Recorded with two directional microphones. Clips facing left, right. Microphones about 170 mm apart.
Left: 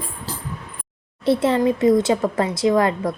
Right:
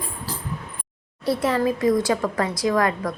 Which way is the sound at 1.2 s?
25° left (ahead or behind).